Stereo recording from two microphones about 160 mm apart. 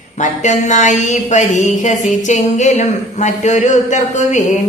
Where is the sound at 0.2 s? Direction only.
50° left (ahead or behind).